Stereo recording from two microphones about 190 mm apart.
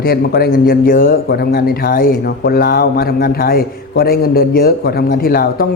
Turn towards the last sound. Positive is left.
turn(degrees=50)  # may be behind; listen again after turning